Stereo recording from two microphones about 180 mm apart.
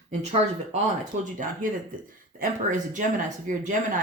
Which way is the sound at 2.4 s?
45° right (ahead or behind).